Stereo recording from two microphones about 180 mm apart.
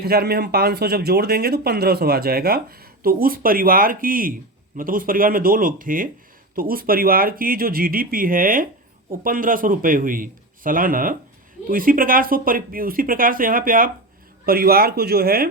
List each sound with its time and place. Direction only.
0.0 s speech: 60° right (ahead or behind)